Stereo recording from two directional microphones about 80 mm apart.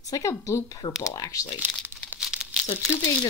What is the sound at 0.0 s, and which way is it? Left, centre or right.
Speech, left.